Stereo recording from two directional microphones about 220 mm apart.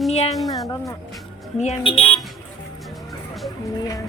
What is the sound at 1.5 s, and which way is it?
Speech, 25° left (ahead or behind).